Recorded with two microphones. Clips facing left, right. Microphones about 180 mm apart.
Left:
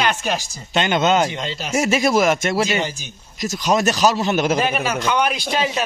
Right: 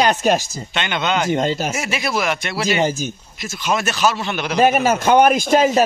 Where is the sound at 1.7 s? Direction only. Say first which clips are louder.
Left 6 dB; 45° left (ahead or behind).